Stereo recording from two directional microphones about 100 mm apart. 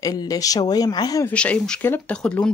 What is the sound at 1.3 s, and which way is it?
Speech, 10° left (ahead or behind).